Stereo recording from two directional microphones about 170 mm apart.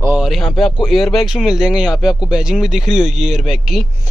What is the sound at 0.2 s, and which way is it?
A man's voice, centre (ahead or behind).